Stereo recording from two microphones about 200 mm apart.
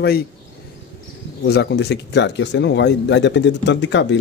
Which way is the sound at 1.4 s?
55° left (ahead or behind).